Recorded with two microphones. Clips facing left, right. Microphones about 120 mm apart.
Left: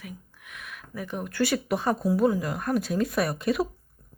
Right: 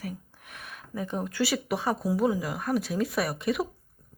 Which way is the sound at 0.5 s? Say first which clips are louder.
Right 1 dB; 35° right (ahead or behind).